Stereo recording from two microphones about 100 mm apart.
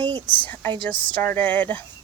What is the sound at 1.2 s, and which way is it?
Speech, 20° left (ahead or behind).